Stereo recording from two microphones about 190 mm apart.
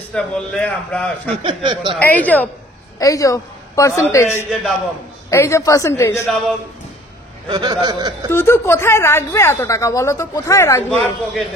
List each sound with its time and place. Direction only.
0.1 s a man's voice: 5° left (ahead or behind)
1.3 s speech: 25° right (ahead or behind)
2.0 s a woman's voice: 10° left (ahead or behind)
7.4 s speech: 25° right (ahead or behind)
8.3 s speech: 15° left (ahead or behind)